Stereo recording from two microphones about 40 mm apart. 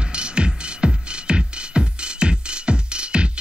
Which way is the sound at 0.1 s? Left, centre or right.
Right.